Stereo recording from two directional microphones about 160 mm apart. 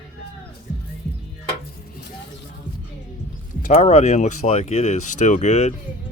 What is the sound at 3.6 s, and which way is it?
Speech, 50° left (ahead or behind).